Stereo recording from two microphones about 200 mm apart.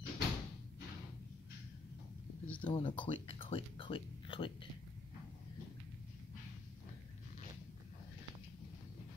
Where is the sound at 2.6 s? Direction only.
25° left (ahead or behind).